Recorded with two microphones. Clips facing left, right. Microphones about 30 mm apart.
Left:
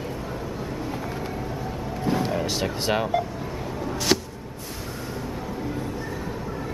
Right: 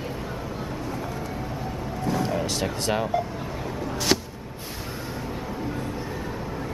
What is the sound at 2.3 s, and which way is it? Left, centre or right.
Speech, centre.